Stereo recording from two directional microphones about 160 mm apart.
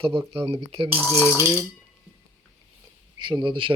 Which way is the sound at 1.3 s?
15° right (ahead or behind).